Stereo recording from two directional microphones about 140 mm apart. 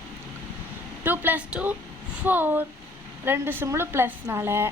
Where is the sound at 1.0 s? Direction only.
15° right (ahead or behind).